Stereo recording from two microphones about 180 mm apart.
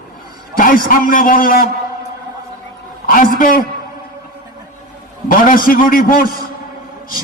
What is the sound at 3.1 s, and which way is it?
Speech, 50° left (ahead or behind).